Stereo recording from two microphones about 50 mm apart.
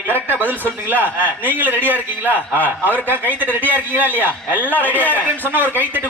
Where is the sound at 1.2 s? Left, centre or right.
Left.